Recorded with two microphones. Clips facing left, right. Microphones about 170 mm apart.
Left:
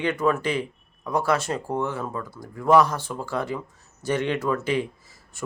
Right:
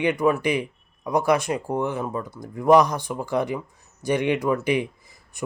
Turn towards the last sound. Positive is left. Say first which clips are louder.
# left 2 dB
turn(degrees=-15)  # may be behind; listen again after turning